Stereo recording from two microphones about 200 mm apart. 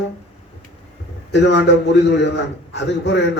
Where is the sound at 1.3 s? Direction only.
60° left (ahead or behind).